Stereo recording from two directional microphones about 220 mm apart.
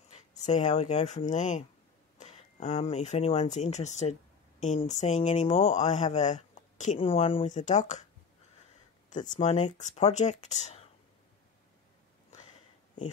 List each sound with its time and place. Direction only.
0.4 s speech: 30° left (ahead or behind)
9.1 s speech: 35° left (ahead or behind)